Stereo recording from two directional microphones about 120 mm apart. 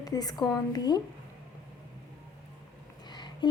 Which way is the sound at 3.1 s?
40° left (ahead or behind).